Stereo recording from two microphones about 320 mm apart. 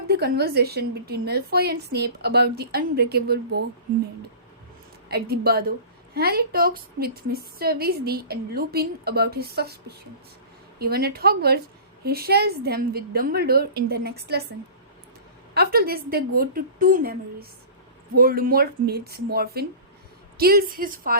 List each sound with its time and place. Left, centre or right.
0.1 s a woman's voice: right
5.0 s a woman's voice: right
10.8 s a woman's voice: right
15.5 s a woman's voice: right
18.2 s a woman's voice: right